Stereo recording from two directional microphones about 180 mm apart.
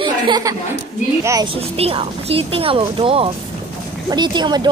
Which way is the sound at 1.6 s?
35° right (ahead or behind).